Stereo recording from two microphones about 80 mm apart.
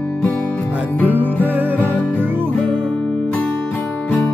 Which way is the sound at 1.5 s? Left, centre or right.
Right.